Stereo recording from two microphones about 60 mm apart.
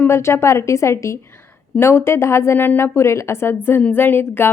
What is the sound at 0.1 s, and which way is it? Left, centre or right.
A woman's voice, left.